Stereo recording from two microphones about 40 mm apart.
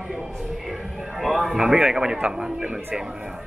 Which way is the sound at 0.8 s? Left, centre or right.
Centre.